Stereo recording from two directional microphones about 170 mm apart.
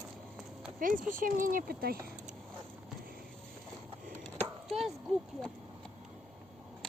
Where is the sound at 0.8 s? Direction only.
50° right (ahead or behind).